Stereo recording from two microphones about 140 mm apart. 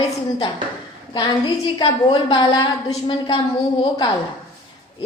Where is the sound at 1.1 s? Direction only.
30° left (ahead or behind).